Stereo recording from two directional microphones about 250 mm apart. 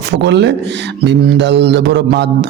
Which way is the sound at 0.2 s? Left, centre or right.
Right.